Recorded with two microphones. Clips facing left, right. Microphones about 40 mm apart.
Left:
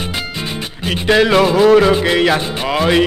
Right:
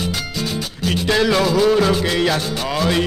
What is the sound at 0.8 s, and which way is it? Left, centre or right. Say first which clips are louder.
Music: left 4 dB; left.